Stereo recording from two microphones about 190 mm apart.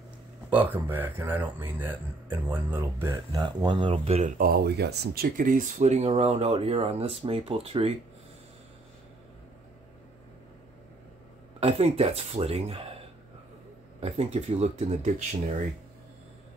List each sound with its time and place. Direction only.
0.5 s speech: 10° right (ahead or behind); by 4.3 s 35° right (ahead or behind)
4.4 s speech: 55° right (ahead or behind); by 7.9 s 30° right (ahead or behind)
11.6 s speech: 30° right (ahead or behind)
14.0 s speech: 35° right (ahead or behind)